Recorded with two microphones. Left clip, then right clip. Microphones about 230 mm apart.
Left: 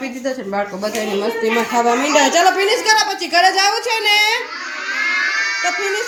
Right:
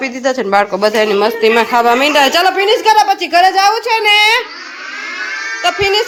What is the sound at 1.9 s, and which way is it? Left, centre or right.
A woman's voice, centre.